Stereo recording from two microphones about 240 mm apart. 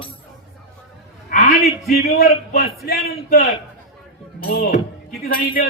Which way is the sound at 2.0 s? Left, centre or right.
Left.